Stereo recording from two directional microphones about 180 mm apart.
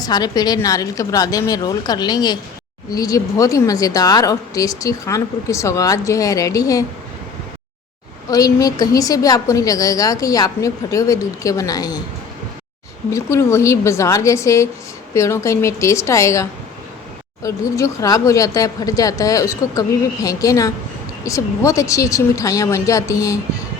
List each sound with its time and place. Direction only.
0.0 s a woman's voice: 20° left (ahead or behind)
8.3 s a woman's voice: 20° left (ahead or behind)
13.1 s a woman's voice: 15° left (ahead or behind)